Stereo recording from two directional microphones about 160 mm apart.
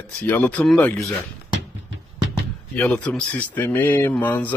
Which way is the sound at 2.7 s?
5° left (ahead or behind).